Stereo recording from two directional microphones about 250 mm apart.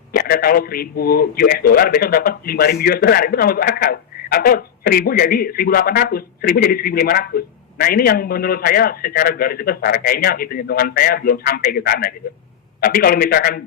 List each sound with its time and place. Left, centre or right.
0.1 s speech: left